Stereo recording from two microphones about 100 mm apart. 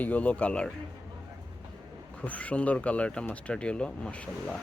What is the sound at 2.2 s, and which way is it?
Speech, 15° left (ahead or behind).